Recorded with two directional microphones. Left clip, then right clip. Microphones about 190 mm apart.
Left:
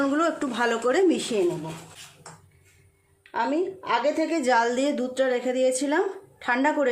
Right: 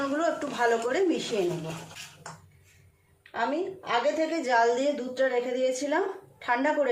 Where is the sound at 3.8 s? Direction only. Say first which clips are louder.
Left 1 dB; 55° left (ahead or behind).